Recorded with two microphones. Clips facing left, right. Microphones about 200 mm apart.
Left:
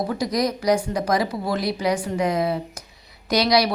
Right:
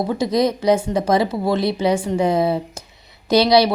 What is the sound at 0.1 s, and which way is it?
A woman's voice, 25° right (ahead or behind).